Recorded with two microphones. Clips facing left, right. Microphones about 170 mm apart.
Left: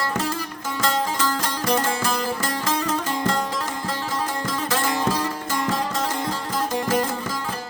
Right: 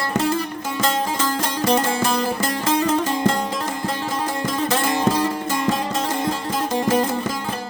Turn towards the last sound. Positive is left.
turn(degrees=-25)  # may be behind; listen again after turning